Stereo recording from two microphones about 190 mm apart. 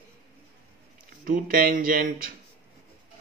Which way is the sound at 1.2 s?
45° right (ahead or behind).